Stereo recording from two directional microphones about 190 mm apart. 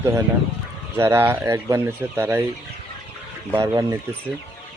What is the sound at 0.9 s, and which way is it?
Speech, 10° right (ahead or behind).